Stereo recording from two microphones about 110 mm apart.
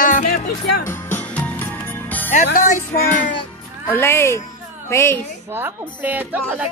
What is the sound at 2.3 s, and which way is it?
Speech, 90° left.